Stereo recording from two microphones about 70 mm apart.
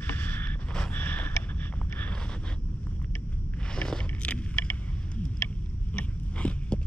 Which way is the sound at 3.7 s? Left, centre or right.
Centre.